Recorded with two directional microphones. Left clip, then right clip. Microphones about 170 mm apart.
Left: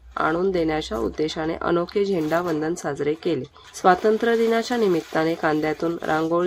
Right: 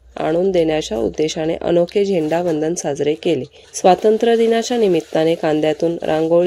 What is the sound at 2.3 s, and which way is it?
Speech, 35° left (ahead or behind).